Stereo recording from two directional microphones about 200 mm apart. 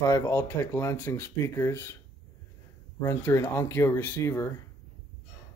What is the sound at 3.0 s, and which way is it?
Speech, 15° left (ahead or behind).